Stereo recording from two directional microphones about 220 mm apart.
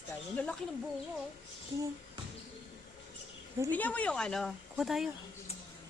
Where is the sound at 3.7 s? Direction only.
5° left (ahead or behind).